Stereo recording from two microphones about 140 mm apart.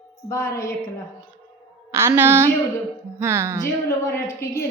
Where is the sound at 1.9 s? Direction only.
20° right (ahead or behind).